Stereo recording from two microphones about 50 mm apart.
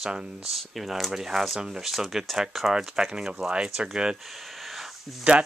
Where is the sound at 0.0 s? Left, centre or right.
Centre.